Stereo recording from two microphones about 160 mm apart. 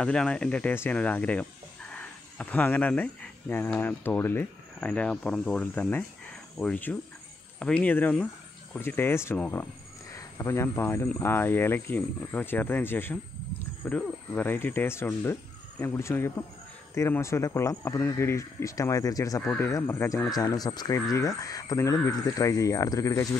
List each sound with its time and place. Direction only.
0.0 s speech: 5° left (ahead or behind)